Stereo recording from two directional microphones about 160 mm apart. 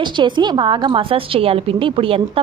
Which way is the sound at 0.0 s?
30° right (ahead or behind).